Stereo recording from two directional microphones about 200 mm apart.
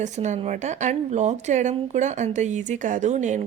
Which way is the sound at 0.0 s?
35° right (ahead or behind).